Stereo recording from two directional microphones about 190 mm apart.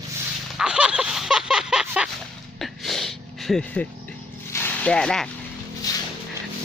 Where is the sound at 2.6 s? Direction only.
Centre (ahead or behind).